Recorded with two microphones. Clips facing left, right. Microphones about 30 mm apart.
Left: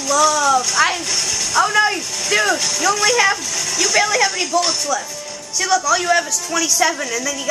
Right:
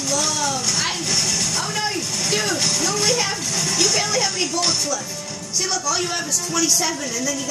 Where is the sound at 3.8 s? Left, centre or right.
Left.